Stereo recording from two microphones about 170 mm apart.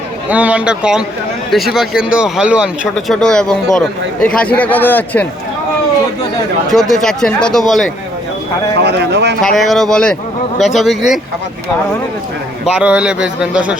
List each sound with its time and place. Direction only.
0.3 s a man's voice: 10° right (ahead or behind); by 5.3 s 10° left (ahead or behind)
6.7 s a man's voice: centre (ahead or behind)
8.8 s speech: 85° right
9.4 s a man's voice: centre (ahead or behind)
12.7 s a man's voice: 5° right (ahead or behind)